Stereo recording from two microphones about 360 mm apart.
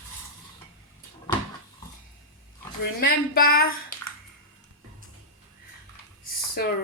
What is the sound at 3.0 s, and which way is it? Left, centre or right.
Speech, left.